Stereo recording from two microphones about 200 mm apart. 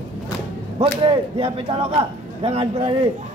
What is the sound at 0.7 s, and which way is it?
A man's voice, 30° right (ahead or behind).